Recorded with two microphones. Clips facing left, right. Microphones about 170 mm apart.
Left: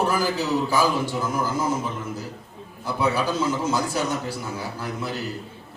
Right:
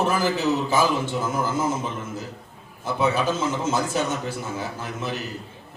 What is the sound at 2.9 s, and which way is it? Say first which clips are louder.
Speech: right 1 dB; 20° right (ahead or behind).